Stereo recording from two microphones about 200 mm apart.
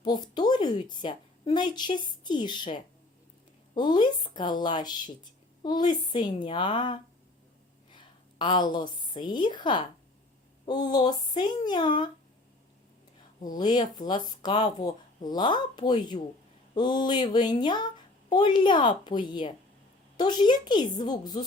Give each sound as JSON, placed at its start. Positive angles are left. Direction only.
{"t": 0.0, "sound": "a woman's voice", "side_deg": 20}
{"t": 7.9, "sound": "a sound", "side_deg": 25}
{"t": 9.1, "sound": "speech", "side_deg": 20}
{"t": 13.6, "sound": "speech", "side_deg": 20}